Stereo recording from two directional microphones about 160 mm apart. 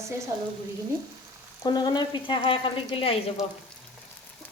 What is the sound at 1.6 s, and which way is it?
Speech, 25° left (ahead or behind).